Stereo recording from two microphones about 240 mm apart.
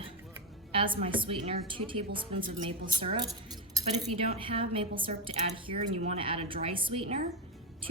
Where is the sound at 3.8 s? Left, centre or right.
Centre.